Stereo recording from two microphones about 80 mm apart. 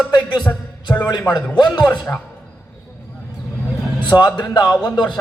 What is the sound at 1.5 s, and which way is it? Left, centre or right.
Speech, left.